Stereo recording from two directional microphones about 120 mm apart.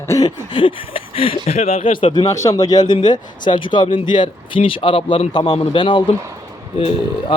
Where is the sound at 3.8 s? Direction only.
90° left.